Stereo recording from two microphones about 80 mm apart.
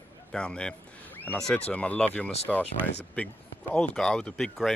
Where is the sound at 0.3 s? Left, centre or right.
Centre.